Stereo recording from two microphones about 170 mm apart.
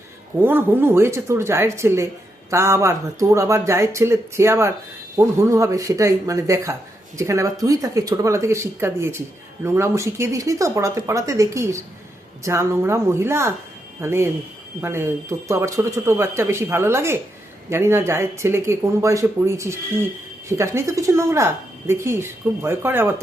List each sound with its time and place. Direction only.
0.4 s speech: 10° right (ahead or behind)